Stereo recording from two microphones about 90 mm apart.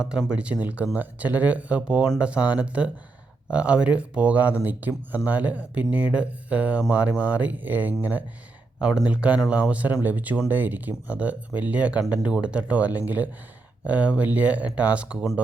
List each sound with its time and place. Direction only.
0.0 s speech: 5° right (ahead or behind)
8.8 s speech: 10° right (ahead or behind)